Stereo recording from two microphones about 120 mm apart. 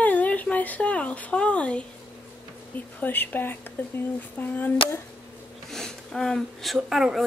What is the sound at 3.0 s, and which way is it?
Speech, 15° left (ahead or behind).